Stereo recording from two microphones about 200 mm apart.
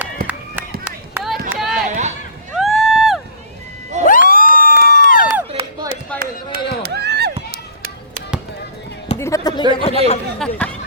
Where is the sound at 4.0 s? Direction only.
45° left (ahead or behind).